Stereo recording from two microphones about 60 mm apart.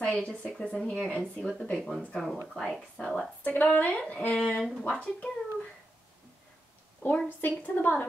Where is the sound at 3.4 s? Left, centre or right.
Left.